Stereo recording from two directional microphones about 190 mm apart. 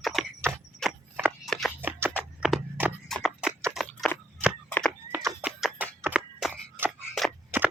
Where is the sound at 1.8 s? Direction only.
10° right (ahead or behind).